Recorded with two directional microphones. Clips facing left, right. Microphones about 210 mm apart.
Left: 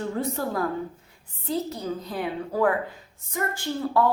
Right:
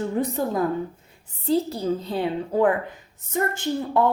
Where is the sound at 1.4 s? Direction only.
30° right (ahead or behind).